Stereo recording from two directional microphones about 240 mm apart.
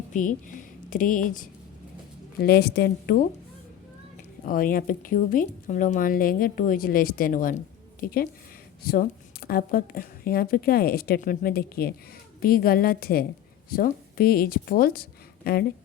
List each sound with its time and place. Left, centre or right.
0.1 s a woman's voice: left
4.4 s speech: left